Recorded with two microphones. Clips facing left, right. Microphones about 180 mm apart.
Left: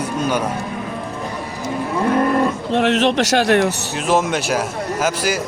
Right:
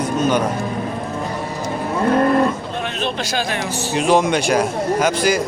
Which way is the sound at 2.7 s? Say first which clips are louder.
Left 8 dB; 85° left.